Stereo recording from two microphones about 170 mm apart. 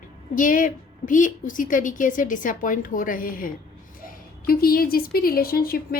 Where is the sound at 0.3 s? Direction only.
50° left (ahead or behind).